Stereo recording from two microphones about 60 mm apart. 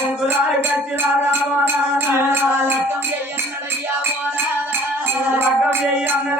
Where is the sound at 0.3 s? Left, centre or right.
Right.